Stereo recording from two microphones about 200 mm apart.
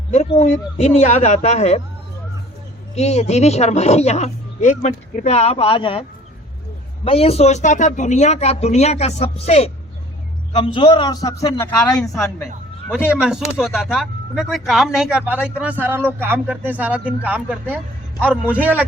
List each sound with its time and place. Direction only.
0.1 s speech: 30° left (ahead or behind)
2.9 s a man's voice: 35° left (ahead or behind); by 11.9 s 10° left (ahead or behind)
11.9 s a man's voice: 20° left (ahead or behind)
13.1 s speech: 5° right (ahead or behind)